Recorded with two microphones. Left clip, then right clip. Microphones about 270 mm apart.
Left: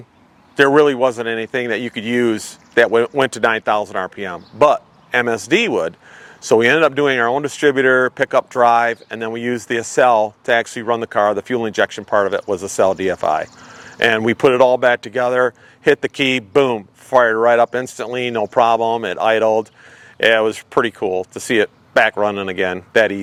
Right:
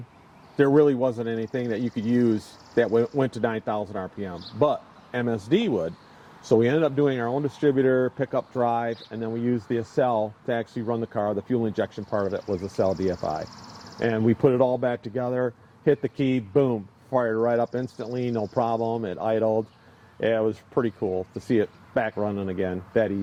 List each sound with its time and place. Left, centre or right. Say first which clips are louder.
0.5 s speech: left 7 dB; centre
21.0 s speech: left 8 dB; left
21.4 s speech: left 8 dB; centre